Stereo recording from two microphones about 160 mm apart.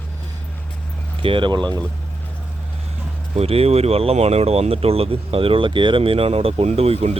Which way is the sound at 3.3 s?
40° right (ahead or behind).